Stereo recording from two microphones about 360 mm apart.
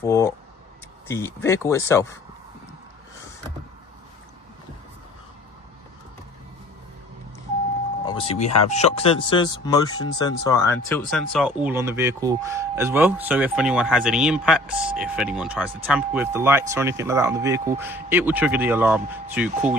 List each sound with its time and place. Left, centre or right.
0.0 s speech: centre
8.0 s a sound: centre
8.4 s speech: left
8.7 s speech: centre